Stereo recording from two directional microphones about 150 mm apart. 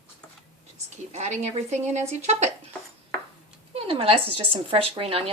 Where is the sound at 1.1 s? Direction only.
50° right (ahead or behind).